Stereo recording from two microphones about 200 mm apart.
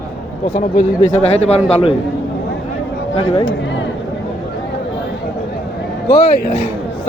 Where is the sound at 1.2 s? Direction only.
30° left (ahead or behind).